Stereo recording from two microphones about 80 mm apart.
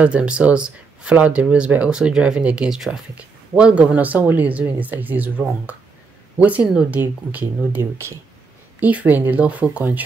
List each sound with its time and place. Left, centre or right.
0.0 s speech: centre; by 8.2 s right
8.7 s speech: centre